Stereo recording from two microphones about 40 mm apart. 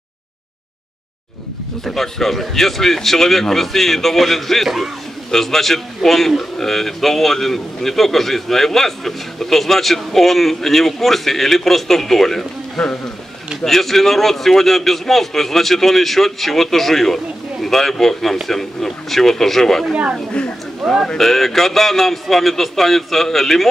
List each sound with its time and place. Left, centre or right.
1.9 s a man's voice: centre
4.6 s speech: centre
5.3 s a man's voice: centre